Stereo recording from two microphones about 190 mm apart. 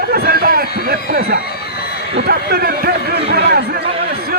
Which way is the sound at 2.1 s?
55° right (ahead or behind).